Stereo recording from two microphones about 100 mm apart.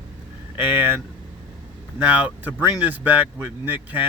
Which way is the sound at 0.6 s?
20° right (ahead or behind).